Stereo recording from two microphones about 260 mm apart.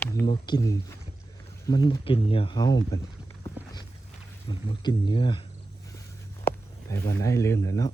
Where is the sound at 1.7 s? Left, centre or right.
Centre.